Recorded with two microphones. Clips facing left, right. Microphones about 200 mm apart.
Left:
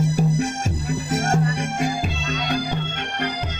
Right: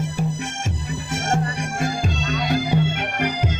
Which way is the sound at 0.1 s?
40° left (ahead or behind).